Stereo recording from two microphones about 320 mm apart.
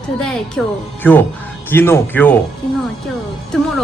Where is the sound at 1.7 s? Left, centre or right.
Centre.